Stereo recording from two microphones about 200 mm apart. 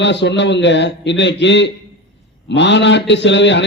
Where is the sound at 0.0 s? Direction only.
60° left (ahead or behind).